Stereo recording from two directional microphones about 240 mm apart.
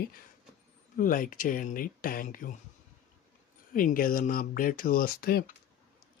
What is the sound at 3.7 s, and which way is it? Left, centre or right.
Speech, left.